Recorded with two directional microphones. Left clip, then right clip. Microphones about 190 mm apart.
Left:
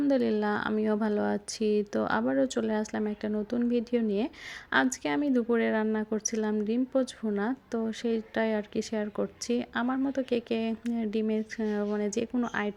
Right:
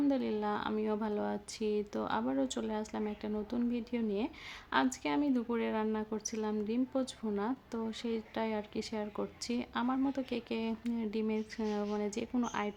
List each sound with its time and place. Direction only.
0.0 s a woman's voice: 25° left (ahead or behind)